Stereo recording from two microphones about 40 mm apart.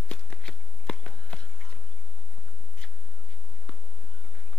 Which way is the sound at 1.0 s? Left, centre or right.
Left.